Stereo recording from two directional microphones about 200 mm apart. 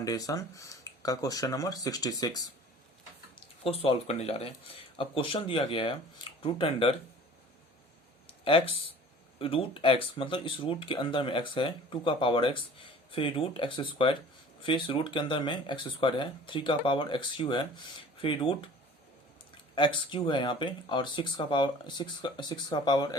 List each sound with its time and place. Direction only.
0.0 s speech: 20° left (ahead or behind)
3.6 s speech: 30° left (ahead or behind)
8.4 s speech: 30° left (ahead or behind)
19.7 s speech: 25° left (ahead or behind)